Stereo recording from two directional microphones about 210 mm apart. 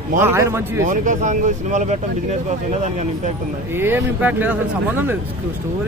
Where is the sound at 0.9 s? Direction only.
35° right (ahead or behind).